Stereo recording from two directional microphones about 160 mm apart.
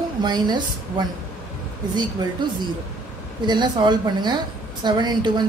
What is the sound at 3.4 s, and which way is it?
A woman's voice, 30° right (ahead or behind).